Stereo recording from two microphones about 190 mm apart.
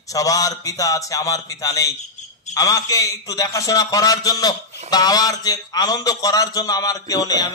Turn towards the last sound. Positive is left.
turn(degrees=20)  # may be behind; listen again after turning